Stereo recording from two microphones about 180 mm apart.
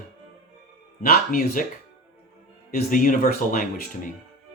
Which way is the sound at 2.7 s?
50° left (ahead or behind).